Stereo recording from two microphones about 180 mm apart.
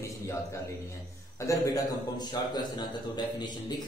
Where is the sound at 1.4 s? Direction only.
20° left (ahead or behind).